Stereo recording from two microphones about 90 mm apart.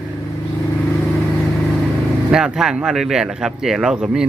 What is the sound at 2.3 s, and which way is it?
Speech, 5° right (ahead or behind).